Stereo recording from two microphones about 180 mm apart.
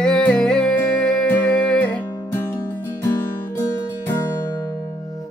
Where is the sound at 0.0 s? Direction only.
5° left (ahead or behind).